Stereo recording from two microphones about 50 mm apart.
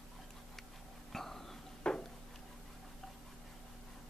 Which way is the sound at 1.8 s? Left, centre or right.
Centre.